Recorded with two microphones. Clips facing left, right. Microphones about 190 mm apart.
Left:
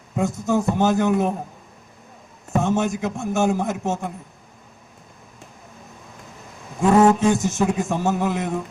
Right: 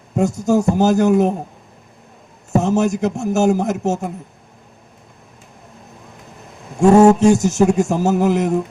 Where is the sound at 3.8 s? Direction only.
40° right (ahead or behind).